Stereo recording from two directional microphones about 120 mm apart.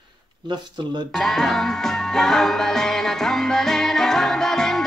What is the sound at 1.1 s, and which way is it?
Music, 5° left (ahead or behind).